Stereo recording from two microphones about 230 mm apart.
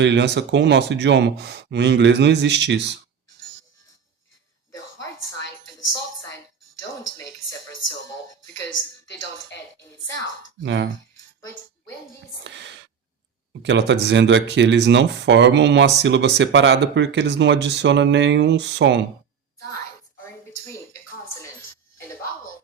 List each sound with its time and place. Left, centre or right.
0.0 s speech: right
10.6 s speech: right
12.4 s speech: right